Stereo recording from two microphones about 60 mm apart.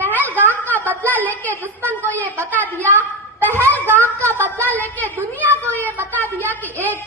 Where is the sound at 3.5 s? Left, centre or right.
Right.